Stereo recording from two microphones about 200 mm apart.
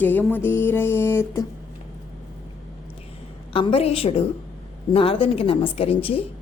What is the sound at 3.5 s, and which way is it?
A woman's voice, 25° left (ahead or behind).